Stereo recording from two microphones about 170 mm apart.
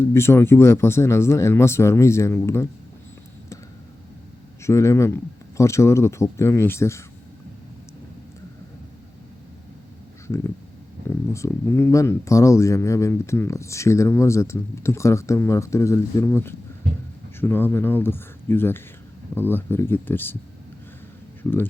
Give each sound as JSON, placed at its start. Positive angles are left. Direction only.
{"t": 0.0, "sound": "speech", "side_deg": 15}
{"t": 4.6, "sound": "speech", "side_deg": 15}
{"t": 11.1, "sound": "speech", "side_deg": 15}